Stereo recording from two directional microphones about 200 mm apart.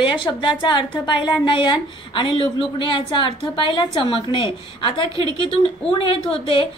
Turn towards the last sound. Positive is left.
turn(degrees=30)  # may be behind; listen again after turning